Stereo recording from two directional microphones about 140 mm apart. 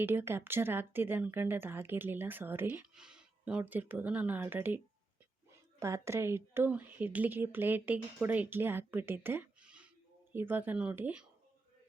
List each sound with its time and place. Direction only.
0.0 s speech: 15° right (ahead or behind)
5.8 s speech: 20° right (ahead or behind)